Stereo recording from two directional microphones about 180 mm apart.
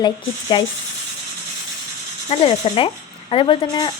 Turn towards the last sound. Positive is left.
turn(degrees=25)  # may be behind; listen again after turning